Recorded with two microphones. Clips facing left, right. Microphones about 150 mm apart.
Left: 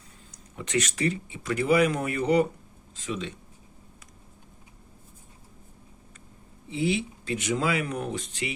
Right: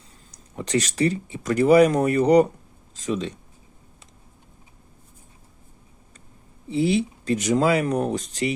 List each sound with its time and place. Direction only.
0.3 s speech: 35° right (ahead or behind)
6.7 s speech: 35° right (ahead or behind)